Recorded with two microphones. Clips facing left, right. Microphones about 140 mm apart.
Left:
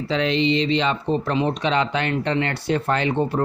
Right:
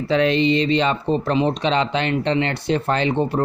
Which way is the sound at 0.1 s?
50° right (ahead or behind).